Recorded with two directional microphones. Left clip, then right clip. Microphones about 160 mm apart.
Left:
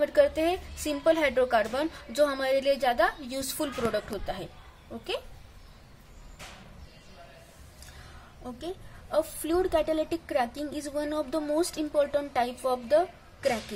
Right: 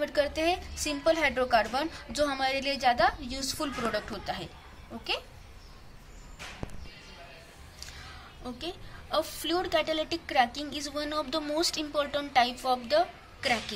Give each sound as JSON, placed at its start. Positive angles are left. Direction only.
{"t": 0.0, "sound": "a woman's voice", "side_deg": 55}
{"t": 8.6, "sound": "a woman's voice", "side_deg": 55}